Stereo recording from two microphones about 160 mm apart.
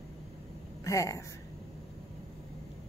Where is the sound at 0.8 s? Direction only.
20° left (ahead or behind).